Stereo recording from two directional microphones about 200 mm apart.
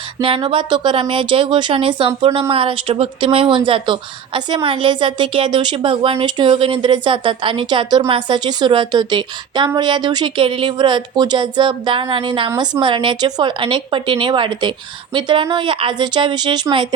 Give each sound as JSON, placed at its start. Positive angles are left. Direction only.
{"t": 0.2, "sound": "a woman's voice", "side_deg": -25}